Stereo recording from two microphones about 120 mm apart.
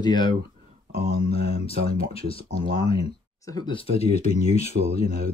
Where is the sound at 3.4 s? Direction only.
35° left (ahead or behind).